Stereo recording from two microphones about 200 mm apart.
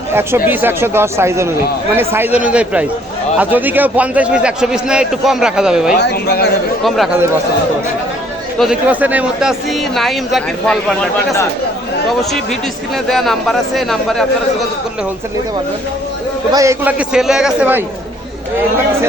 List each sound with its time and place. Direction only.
0.1 s speech: 10° right (ahead or behind)
6.0 s speech: 50° left (ahead or behind)
6.8 s speech: centre (ahead or behind)
8.5 s speech: centre (ahead or behind)
13.1 s speech: centre (ahead or behind)
16.5 s speech: 15° right (ahead or behind)